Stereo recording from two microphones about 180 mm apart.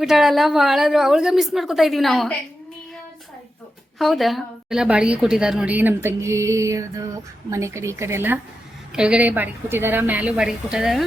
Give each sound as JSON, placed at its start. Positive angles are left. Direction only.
{"t": 0.0, "sound": "a woman's voice", "side_deg": 0}
{"t": 3.9, "sound": "a woman's voice", "side_deg": 0}